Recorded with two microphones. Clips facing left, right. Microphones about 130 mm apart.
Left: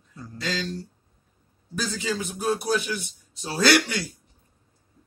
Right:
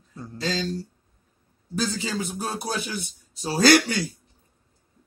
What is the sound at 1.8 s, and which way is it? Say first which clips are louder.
A man's voice: right 1 dB; 30° right (ahead or behind).